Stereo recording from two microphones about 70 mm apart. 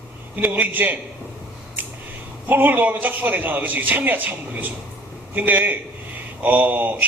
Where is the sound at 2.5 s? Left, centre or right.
Right.